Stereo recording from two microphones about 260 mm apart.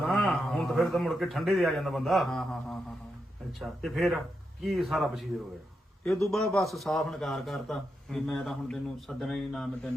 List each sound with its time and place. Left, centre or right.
0.0 s a man's voice: centre